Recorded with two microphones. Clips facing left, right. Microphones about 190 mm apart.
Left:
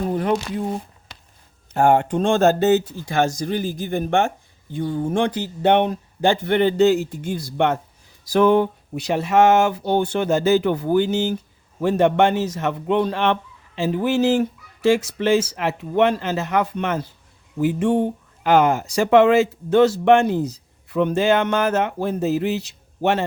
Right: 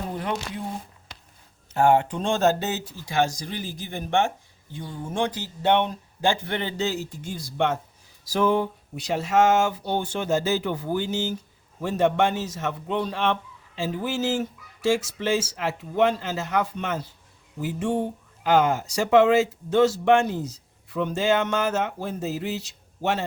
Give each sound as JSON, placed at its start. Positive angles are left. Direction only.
{"t": 0.2, "sound": "speech", "side_deg": 45}
{"t": 1.7, "sound": "speech", "side_deg": 50}
{"t": 4.7, "sound": "speech", "side_deg": 60}